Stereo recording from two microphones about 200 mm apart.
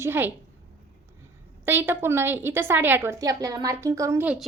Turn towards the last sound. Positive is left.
turn(degrees=-5)  # may be behind; listen again after turning